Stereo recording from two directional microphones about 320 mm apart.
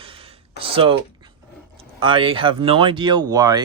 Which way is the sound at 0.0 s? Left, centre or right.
Centre.